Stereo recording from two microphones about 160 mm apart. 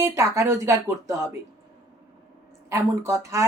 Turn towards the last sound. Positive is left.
turn(degrees=-20)  # may be behind; listen again after turning